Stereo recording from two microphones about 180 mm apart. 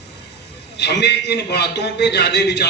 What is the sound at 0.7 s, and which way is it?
A man's voice, 70° left (ahead or behind).